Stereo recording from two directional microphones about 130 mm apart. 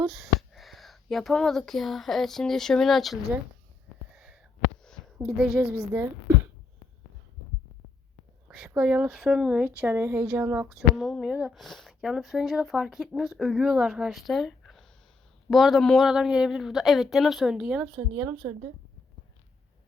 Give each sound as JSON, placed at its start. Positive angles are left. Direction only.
{"t": 0.1, "sound": "speech", "side_deg": 0}
{"t": 4.1, "sound": "a sound", "side_deg": -5}
{"t": 5.1, "sound": "speech", "side_deg": -5}
{"t": 8.4, "sound": "speech", "side_deg": -5}
{"t": 10.7, "sound": "speech", "side_deg": 0}